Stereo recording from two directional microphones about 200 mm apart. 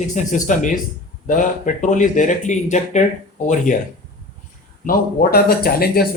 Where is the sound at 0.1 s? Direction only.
40° left (ahead or behind).